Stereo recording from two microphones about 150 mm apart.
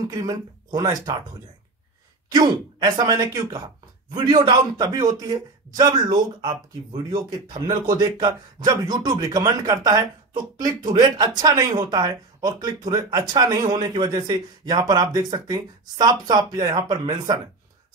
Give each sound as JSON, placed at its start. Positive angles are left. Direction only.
{"t": 0.0, "sound": "a man's voice", "side_deg": -25}
{"t": 2.3, "sound": "a man's voice", "side_deg": -30}